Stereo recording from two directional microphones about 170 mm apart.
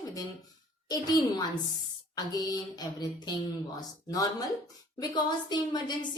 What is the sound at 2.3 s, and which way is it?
Speech, 20° left (ahead or behind).